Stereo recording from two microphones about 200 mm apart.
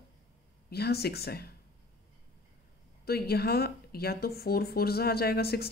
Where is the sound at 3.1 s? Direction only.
50° left (ahead or behind).